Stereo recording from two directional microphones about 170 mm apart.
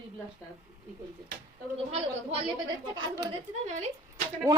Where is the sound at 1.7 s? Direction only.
35° right (ahead or behind).